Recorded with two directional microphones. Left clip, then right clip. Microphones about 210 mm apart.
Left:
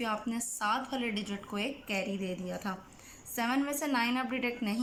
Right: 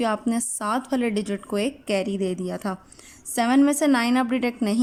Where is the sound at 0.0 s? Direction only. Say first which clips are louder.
Right 10 dB; 50° right (ahead or behind).